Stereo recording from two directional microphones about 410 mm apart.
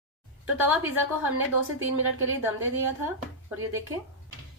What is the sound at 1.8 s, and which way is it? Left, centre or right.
A woman's voice, right.